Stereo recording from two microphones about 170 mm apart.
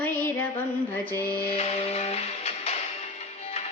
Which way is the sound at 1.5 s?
35° left (ahead or behind).